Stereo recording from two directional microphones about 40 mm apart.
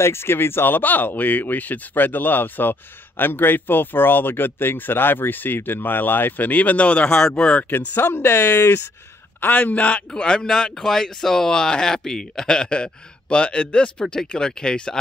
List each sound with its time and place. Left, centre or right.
0.0 s speech: left
7.2 s speech: centre
7.7 s speech: left
8.2 s speech: left
9.4 s a man's voice: left
10.1 s speech: centre